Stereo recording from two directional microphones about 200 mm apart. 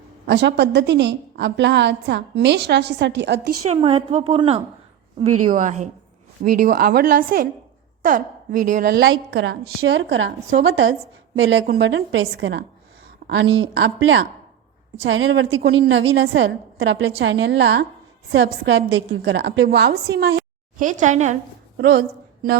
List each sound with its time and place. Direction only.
0.3 s a woman's voice: 60° right (ahead or behind)
3.7 s a woman's voice: 30° right (ahead or behind)
5.5 s a woman's voice: 40° right (ahead or behind)
9.3 s a woman's voice: 60° right (ahead or behind); by 10.9 s 80° right
11.6 s a woman's voice: 50° right (ahead or behind)
11.9 s a woman's voice: 70° right (ahead or behind)
20.7 s speech: 40° right (ahead or behind)
21.8 s a woman's voice: 50° right (ahead or behind)